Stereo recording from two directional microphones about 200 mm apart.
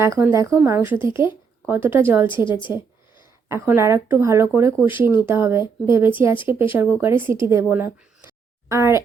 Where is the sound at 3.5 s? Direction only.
15° right (ahead or behind).